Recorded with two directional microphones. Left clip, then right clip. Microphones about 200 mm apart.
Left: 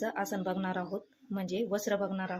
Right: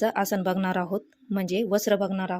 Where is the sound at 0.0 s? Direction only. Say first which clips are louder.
Right 9 dB; 45° right (ahead or behind).